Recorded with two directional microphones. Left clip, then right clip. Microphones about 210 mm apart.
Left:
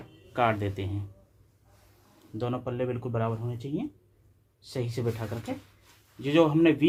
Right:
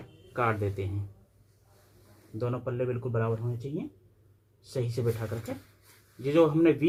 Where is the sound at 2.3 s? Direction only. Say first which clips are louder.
Left 1 dB; 30° left (ahead or behind).